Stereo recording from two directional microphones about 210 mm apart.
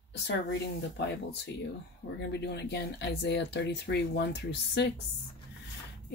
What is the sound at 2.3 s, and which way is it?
A woman's voice, 50° left (ahead or behind).